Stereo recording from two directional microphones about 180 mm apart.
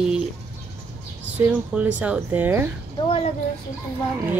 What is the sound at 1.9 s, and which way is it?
Speech, 5° right (ahead or behind).